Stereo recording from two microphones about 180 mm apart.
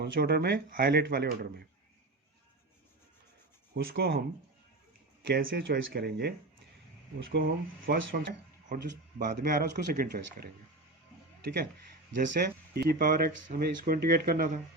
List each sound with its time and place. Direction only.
0.0 s speech: 60° right (ahead or behind)
3.9 s speech: 70° right (ahead or behind)
5.4 s speech: 55° right (ahead or behind)
7.4 s speech: 55° right (ahead or behind)